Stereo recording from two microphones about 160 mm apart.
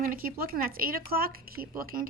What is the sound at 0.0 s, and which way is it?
Speech, 65° right (ahead or behind).